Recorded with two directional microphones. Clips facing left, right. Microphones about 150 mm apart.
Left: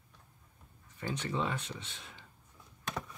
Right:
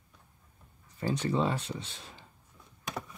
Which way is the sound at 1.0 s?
35° right (ahead or behind).